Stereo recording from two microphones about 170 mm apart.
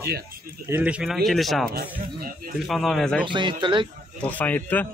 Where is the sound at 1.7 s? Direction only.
65° right (ahead or behind).